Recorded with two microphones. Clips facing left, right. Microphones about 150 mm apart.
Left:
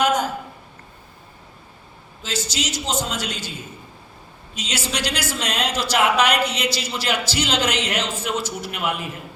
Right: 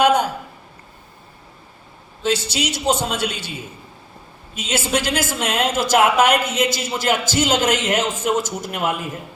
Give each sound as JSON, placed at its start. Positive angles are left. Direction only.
{"t": 0.0, "sound": "a sound", "side_deg": -60}
{"t": 2.2, "sound": "a man's voice", "side_deg": -60}
{"t": 4.5, "sound": "a woman's voice", "side_deg": -50}